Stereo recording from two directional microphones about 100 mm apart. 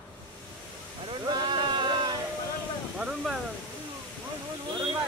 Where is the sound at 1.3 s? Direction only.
50° right (ahead or behind).